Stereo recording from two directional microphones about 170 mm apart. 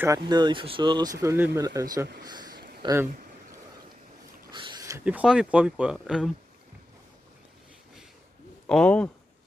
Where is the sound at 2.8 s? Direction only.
15° right (ahead or behind).